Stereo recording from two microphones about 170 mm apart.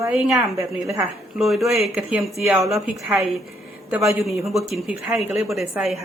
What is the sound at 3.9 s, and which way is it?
A woman's voice, 15° right (ahead or behind).